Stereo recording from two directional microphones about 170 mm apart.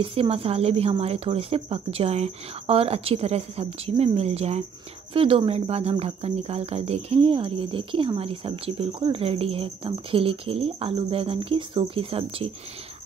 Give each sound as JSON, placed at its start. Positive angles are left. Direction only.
{"t": 0.0, "sound": "cricket", "side_deg": -35}